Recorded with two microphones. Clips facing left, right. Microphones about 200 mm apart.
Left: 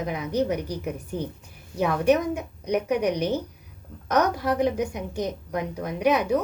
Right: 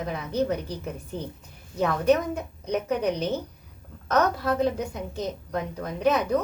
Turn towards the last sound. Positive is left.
turn(degrees=10)  # may be behind; listen again after turning